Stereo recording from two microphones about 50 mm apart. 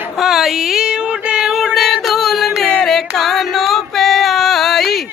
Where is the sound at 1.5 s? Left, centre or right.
Centre.